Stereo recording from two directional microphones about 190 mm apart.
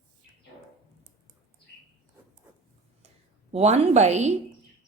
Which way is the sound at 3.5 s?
35° right (ahead or behind).